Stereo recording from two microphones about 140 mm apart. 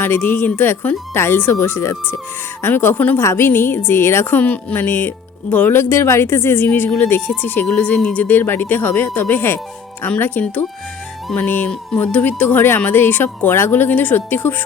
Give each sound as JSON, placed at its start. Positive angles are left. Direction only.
{"t": 0.0, "sound": "a woman's voice", "side_deg": 15}